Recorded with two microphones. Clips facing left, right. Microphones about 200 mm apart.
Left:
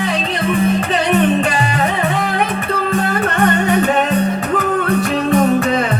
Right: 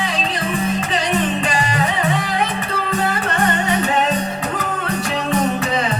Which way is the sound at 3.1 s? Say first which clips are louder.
Left 4 dB; 60° left (ahead or behind).